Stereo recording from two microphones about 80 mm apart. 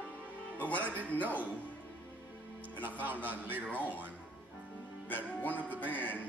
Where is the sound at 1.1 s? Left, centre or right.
Centre.